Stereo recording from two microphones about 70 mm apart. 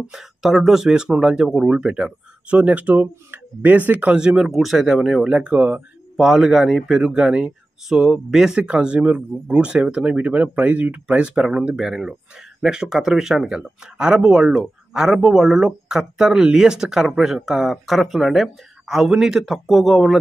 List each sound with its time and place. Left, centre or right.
0.1 s speech: centre; by 4.2 s right
4.2 s speech: centre
5.2 s speech: centre